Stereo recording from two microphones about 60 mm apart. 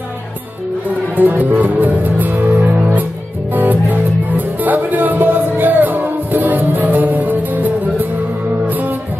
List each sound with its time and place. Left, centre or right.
1.1 s music: right